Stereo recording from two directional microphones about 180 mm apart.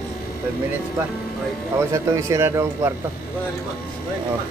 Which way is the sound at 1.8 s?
15° right (ahead or behind).